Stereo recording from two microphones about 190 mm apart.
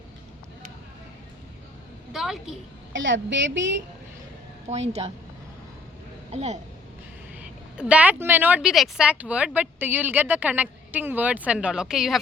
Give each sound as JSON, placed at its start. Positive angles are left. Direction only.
{"t": 2.1, "sound": "a woman's voice", "side_deg": 0}
{"t": 2.9, "sound": "a woman's voice", "side_deg": -75}
{"t": 4.7, "sound": "a woman's voice", "side_deg": -35}
{"t": 6.3, "sound": "a woman's voice", "side_deg": -35}
{"t": 7.8, "sound": "speech", "side_deg": -5}